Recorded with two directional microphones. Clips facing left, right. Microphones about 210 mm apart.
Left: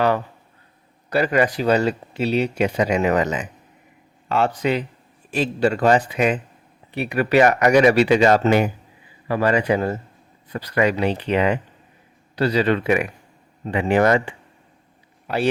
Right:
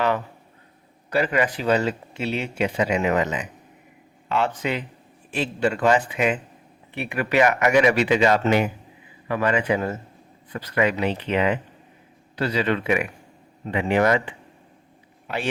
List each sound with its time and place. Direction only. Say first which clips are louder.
1.1 s speech: left 3 dB; 40° left (ahead or behind)